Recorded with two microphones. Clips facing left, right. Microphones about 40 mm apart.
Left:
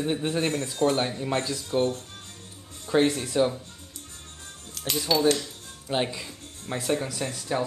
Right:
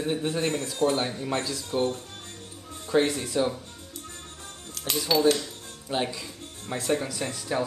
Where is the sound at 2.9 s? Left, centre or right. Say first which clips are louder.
Left 1 dB; centre.